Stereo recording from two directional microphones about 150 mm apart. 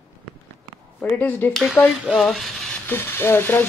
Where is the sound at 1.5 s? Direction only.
5° left (ahead or behind).